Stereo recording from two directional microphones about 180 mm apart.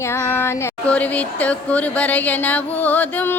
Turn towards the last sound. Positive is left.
turn(degrees=10)  # may be behind; listen again after turning